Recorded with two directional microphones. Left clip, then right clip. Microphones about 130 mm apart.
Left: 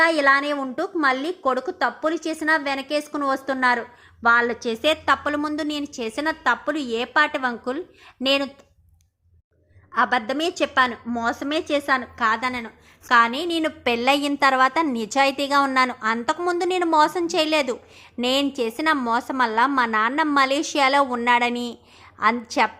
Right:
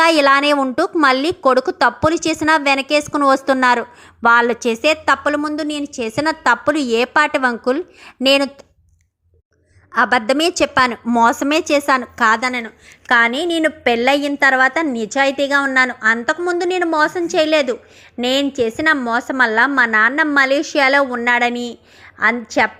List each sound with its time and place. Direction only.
0.0 s a woman's voice: 30° right (ahead or behind)
9.9 s a woman's voice: 30° right (ahead or behind)
12.1 s a woman's voice: 40° right (ahead or behind); by 22.7 s 15° right (ahead or behind)